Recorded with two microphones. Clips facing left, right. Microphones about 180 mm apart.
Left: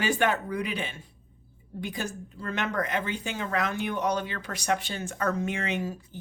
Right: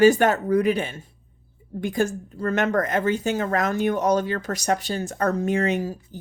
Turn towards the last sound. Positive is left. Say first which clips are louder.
# right 8 dB
turn(degrees=-40)  # may be behind; listen again after turning